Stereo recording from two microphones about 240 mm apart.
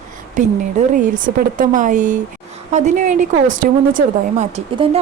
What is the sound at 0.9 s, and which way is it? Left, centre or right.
A woman's voice, right.